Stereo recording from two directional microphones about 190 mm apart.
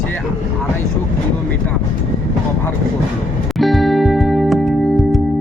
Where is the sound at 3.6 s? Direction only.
Centre (ahead or behind).